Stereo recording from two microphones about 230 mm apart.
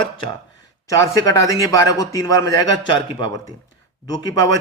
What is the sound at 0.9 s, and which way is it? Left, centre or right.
A man's voice, centre.